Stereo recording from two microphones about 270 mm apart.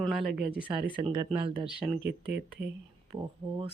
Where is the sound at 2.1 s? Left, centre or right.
Right.